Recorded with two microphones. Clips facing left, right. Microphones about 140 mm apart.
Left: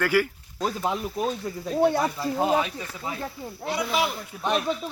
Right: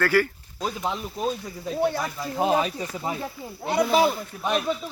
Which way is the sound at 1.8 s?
20° left (ahead or behind).